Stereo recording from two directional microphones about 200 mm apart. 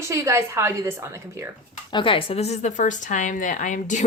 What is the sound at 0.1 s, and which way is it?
A woman's voice, 15° right (ahead or behind).